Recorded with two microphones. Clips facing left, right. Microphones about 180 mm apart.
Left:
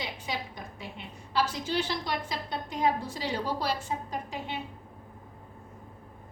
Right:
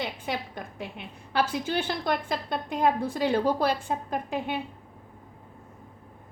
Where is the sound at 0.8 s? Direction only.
60° right (ahead or behind).